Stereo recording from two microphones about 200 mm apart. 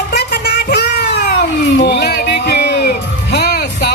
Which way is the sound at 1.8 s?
55° left (ahead or behind).